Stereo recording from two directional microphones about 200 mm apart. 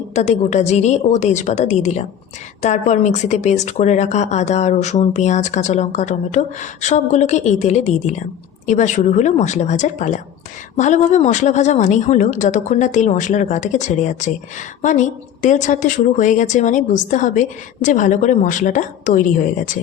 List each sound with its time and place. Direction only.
0.1 s speech: 35° left (ahead or behind)